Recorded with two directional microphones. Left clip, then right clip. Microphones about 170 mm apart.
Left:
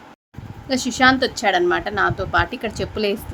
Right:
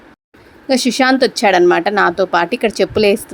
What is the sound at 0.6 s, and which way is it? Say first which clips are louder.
A woman's voice: right 3 dB; 45° right (ahead or behind).